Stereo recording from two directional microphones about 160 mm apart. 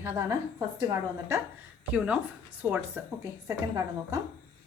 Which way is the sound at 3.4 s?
20° right (ahead or behind).